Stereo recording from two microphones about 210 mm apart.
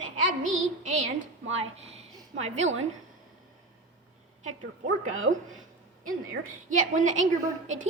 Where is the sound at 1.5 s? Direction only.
30° right (ahead or behind).